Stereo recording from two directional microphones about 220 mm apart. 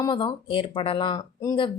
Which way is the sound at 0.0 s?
20° left (ahead or behind).